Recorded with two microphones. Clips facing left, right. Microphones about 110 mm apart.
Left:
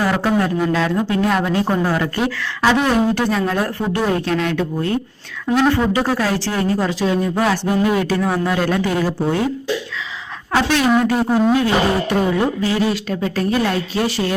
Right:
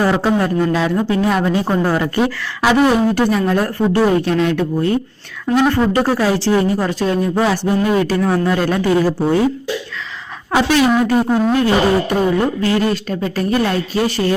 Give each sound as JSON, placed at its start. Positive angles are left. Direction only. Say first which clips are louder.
{"t": 0.0, "sound": "speech", "louder": "right 3 dB", "side_deg": -15}
{"t": 0.3, "sound": "a woman's voice", "louder": "right 1 dB", "side_deg": -5}
{"t": 7.8, "sound": "a woman's voice", "louder": "right 2 dB", "side_deg": 0}
{"t": 10.7, "sound": "a woman's voice", "louder": "right 2 dB", "side_deg": 0}